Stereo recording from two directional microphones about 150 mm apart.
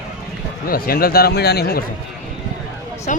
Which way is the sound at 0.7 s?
80° left.